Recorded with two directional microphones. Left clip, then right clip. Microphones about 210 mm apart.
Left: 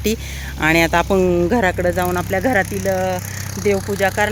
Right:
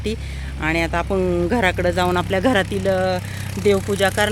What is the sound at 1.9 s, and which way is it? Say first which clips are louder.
Speech: even; 10° right (ahead or behind).